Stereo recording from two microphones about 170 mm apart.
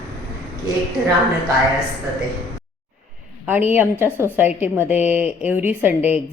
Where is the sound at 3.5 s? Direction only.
10° right (ahead or behind).